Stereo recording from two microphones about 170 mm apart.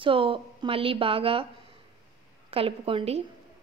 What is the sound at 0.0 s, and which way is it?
A woman's voice, 30° right (ahead or behind).